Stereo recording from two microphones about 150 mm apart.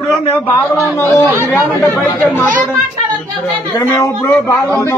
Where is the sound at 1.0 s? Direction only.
20° left (ahead or behind).